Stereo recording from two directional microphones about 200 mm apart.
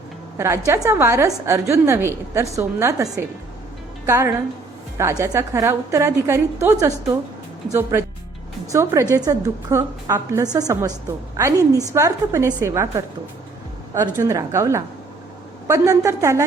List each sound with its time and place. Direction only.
0.3 s a woman's voice: 15° right (ahead or behind)